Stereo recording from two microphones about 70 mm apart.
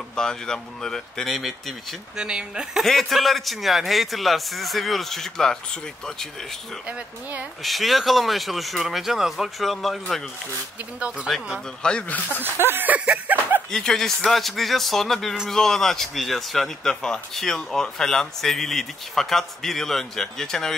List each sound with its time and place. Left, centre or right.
0.1 s speech: centre
2.1 s speech: centre
2.8 s speech: centre
6.9 s speech: right
7.6 s speech: centre
11.3 s speech: centre
12.1 s speech: left
12.6 s a sound: right
13.7 s speech: centre